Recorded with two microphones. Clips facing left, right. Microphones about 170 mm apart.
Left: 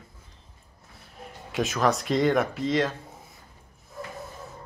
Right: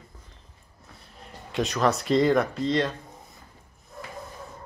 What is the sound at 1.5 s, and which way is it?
A man's voice, centre (ahead or behind).